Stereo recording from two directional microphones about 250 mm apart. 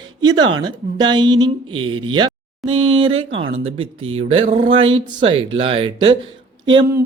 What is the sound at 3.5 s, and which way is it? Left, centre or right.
Speech, right.